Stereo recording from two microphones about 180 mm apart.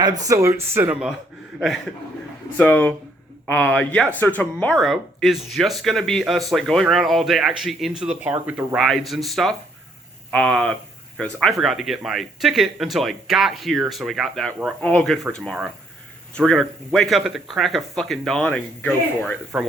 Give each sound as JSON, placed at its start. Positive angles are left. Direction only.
{"t": 0.0, "sound": "speech", "side_deg": -20}
{"t": 2.6, "sound": "speech", "side_deg": 10}
{"t": 19.5, "sound": "speech", "side_deg": -10}